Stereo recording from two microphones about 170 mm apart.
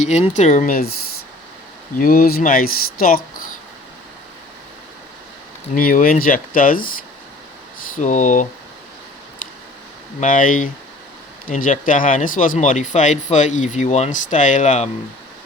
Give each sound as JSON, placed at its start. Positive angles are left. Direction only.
{"t": 0.0, "sound": "speech", "side_deg": 45}
{"t": 2.0, "sound": "speech", "side_deg": 60}
{"t": 5.7, "sound": "speech", "side_deg": 55}
{"t": 7.9, "sound": "speech", "side_deg": 45}
{"t": 10.2, "sound": "speech", "side_deg": 50}